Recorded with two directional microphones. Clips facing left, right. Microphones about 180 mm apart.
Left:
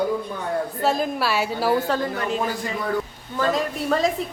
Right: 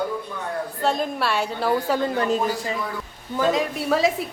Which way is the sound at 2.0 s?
35° right (ahead or behind).